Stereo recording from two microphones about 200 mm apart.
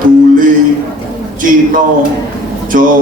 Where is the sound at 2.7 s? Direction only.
40° right (ahead or behind).